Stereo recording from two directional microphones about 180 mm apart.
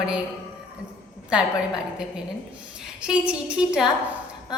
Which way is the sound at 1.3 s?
5° right (ahead or behind).